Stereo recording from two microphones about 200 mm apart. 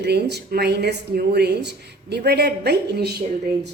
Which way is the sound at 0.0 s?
55° right (ahead or behind).